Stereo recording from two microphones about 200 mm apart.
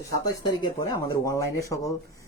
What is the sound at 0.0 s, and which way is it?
Speech, 20° left (ahead or behind).